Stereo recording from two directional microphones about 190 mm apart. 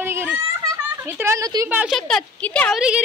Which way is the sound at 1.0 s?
10° right (ahead or behind).